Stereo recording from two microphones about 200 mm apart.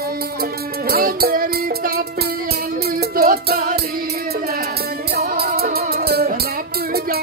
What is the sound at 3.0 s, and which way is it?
Music, 50° right (ahead or behind).